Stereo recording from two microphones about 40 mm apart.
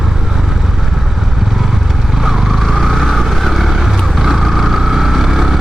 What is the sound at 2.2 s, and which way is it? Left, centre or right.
Vehicle, centre.